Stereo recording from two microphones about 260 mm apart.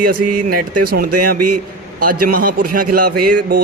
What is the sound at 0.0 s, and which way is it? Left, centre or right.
Speech, right.